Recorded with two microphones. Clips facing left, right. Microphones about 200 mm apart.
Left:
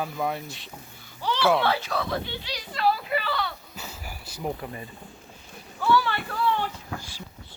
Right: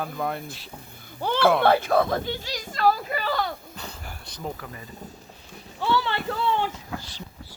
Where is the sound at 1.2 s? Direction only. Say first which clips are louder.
Right 2 dB; 55° right (ahead or behind).